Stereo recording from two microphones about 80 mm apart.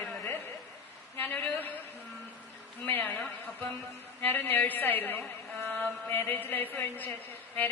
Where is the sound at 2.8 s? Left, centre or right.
Left.